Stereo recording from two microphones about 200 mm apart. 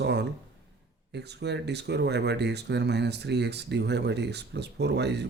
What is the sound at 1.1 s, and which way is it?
Speech, 60° right (ahead or behind).